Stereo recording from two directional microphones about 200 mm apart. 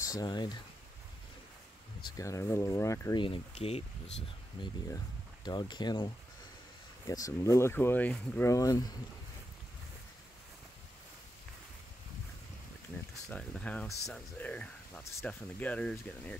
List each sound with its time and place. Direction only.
0.0 s speech: 20° left (ahead or behind)
2.1 s speech: 15° left (ahead or behind)
13.3 s speech: 5° left (ahead or behind)